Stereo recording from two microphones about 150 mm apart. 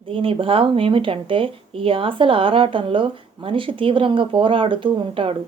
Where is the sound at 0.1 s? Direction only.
35° right (ahead or behind).